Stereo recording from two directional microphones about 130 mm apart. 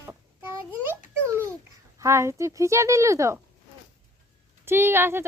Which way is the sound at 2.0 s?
20° right (ahead or behind).